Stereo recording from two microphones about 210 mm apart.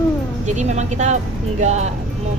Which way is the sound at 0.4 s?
35° right (ahead or behind).